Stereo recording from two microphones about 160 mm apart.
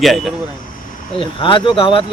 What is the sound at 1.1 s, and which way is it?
Speech, 30° left (ahead or behind).